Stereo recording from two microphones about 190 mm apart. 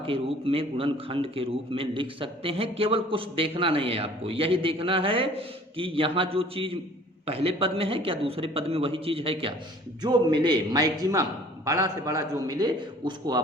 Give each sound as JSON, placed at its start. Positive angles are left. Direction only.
{"t": 0.0, "sound": "a man's voice", "side_deg": -30}